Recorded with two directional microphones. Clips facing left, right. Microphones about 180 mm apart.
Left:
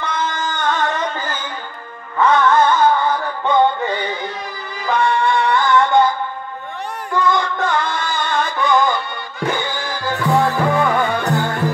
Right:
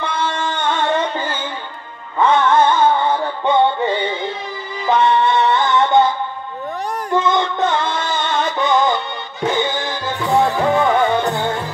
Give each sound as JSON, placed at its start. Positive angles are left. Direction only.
{"t": 0.0, "sound": "music", "side_deg": -30}
{"t": 4.8, "sound": "music", "side_deg": -20}
{"t": 7.2, "sound": "music", "side_deg": -25}